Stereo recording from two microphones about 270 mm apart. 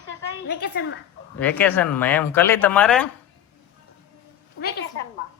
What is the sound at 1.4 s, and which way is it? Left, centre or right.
Speech, centre.